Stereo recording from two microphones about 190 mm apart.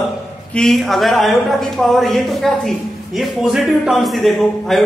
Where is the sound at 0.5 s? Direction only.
Centre (ahead or behind).